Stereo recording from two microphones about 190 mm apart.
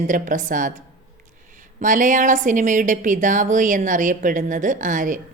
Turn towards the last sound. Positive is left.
turn(degrees=-45)  # may be behind; listen again after turning